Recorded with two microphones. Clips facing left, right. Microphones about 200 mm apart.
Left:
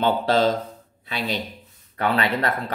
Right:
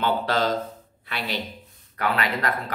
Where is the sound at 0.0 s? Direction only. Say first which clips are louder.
Left 4 dB; 25° left (ahead or behind).